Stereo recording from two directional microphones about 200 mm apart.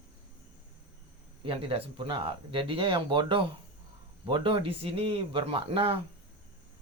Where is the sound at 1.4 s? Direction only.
25° right (ahead or behind).